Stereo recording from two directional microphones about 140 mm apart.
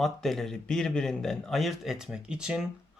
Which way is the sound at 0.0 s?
Centre (ahead or behind).